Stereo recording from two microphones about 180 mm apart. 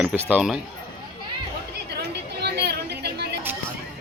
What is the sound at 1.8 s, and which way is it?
Chatter, 65° right (ahead or behind).